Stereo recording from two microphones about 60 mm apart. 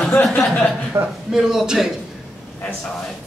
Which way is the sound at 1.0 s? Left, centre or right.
Right.